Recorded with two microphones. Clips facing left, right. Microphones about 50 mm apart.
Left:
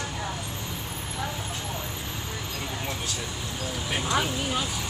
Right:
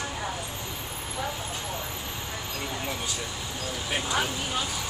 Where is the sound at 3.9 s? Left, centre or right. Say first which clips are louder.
Left 2 dB; centre.